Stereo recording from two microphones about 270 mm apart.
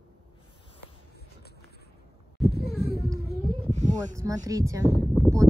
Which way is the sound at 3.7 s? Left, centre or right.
Right.